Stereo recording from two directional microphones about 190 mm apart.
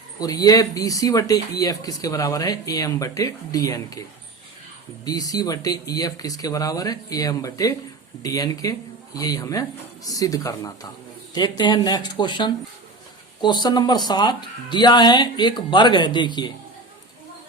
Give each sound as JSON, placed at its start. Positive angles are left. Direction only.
{"t": 0.2, "sound": "speech", "side_deg": 20}
{"t": 5.0, "sound": "speech", "side_deg": 20}